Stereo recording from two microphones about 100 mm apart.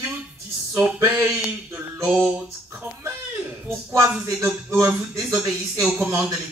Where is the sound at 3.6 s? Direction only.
25° right (ahead or behind).